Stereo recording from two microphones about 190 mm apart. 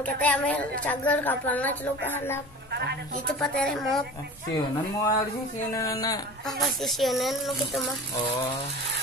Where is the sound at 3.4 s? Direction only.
5° left (ahead or behind).